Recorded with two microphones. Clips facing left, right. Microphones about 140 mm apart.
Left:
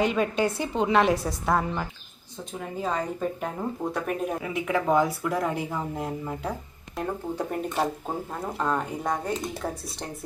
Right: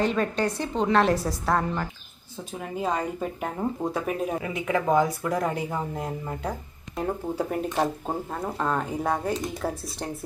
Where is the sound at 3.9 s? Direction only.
Centre (ahead or behind).